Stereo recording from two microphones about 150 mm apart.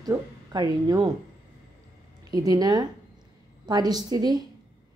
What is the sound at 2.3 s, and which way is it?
A woman's voice, 25° right (ahead or behind).